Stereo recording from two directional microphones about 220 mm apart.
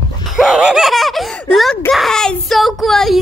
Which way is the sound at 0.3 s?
Centre (ahead or behind).